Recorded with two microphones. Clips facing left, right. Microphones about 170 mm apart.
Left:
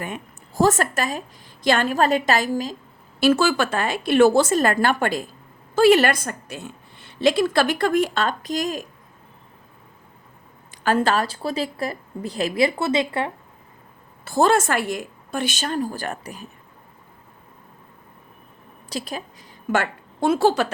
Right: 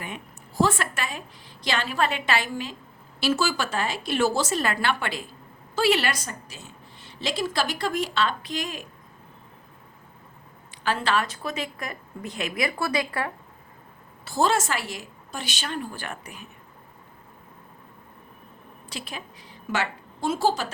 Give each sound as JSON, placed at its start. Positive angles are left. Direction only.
{"t": 0.0, "sound": "a woman's voice", "side_deg": 45}
{"t": 3.2, "sound": "a woman's voice", "side_deg": 55}
{"t": 10.8, "sound": "a woman's voice", "side_deg": 45}
{"t": 14.3, "sound": "a woman's voice", "side_deg": 55}
{"t": 18.9, "sound": "a woman's voice", "side_deg": 40}